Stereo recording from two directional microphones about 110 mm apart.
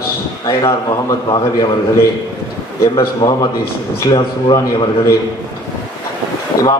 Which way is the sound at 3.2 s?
35° left (ahead or behind).